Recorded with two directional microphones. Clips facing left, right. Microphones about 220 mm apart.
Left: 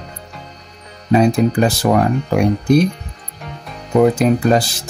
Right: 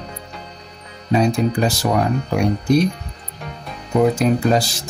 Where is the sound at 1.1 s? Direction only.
55° left (ahead or behind).